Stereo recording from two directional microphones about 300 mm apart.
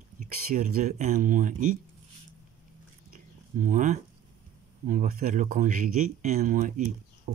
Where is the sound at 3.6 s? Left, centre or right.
Right.